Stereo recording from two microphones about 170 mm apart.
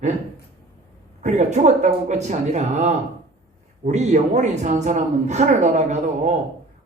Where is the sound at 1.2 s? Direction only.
45° right (ahead or behind).